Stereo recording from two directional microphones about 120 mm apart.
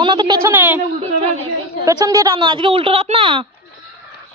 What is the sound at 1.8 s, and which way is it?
Speech, 30° right (ahead or behind).